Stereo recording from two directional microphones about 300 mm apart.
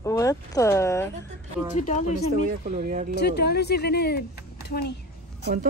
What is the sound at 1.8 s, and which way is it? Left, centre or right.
Speech, left.